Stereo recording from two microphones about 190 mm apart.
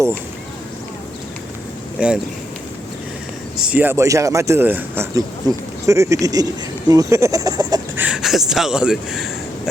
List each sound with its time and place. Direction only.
2.0 s speech: 5° right (ahead or behind)
3.7 s speech: 10° right (ahead or behind)
7.9 s speech: 5° right (ahead or behind)